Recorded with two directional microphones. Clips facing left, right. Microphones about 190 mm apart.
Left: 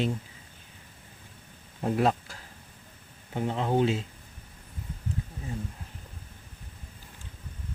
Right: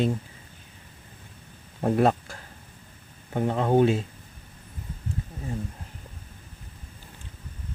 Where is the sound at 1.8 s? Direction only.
50° right (ahead or behind).